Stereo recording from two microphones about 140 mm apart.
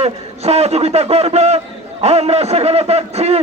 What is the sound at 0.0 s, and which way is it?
A man's voice, 50° right (ahead or behind).